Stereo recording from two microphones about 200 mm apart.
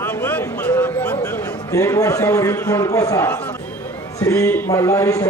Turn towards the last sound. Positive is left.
turn(degrees=15)  # may be behind; listen again after turning